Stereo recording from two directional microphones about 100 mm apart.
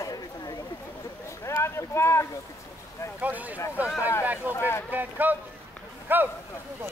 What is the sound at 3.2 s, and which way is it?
Speech, 15° right (ahead or behind).